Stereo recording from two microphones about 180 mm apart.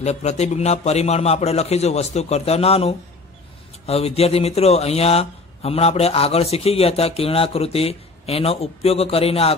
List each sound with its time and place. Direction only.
0.0 s speech: 40° left (ahead or behind)